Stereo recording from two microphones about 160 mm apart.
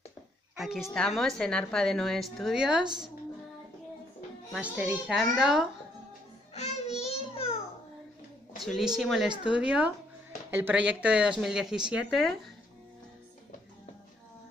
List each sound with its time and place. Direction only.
0.6 s a woman's voice: centre (ahead or behind)
4.6 s a woman's voice: 10° right (ahead or behind)
6.5 s child singing: 45° left (ahead or behind)
8.5 s a woman's voice: centre (ahead or behind)